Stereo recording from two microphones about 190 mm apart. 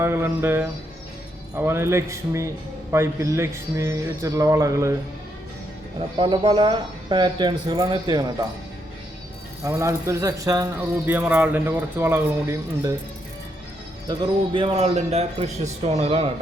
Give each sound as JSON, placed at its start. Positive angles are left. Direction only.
{"t": 0.0, "sound": "a man's voice", "side_deg": -10}
{"t": 6.1, "sound": "speech", "side_deg": -25}
{"t": 9.6, "sound": "a man's voice", "side_deg": -15}
{"t": 14.1, "sound": "speech", "side_deg": -25}